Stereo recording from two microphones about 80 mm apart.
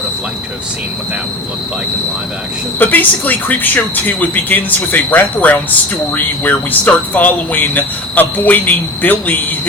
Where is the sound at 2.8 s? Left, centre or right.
Left.